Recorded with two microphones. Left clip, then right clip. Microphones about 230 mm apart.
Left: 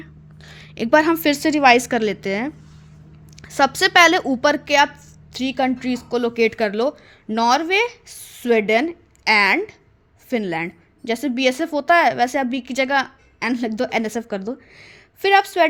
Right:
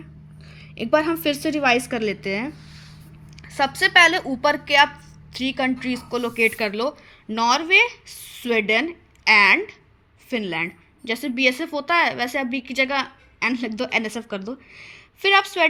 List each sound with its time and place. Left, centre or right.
0.0 s a woman's voice: left